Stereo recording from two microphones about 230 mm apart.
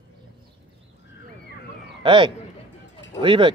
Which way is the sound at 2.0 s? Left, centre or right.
Centre.